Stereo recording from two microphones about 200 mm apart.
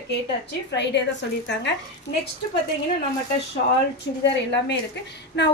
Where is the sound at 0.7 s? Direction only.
60° left (ahead or behind).